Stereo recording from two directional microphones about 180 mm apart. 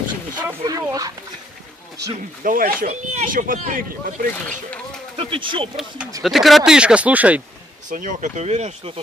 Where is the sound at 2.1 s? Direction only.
50° right (ahead or behind).